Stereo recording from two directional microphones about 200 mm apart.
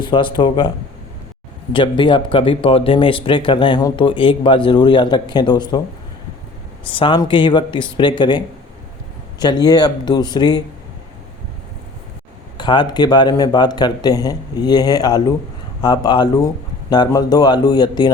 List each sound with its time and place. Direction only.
0.0 s speech: 25° left (ahead or behind)
1.7 s speech: 25° left (ahead or behind)
6.8 s speech: 25° left (ahead or behind)
9.4 s speech: 20° left (ahead or behind)
12.5 s speech: 20° left (ahead or behind)